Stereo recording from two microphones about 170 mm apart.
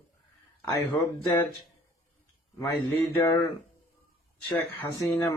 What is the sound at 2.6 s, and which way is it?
Speech, 20° left (ahead or behind).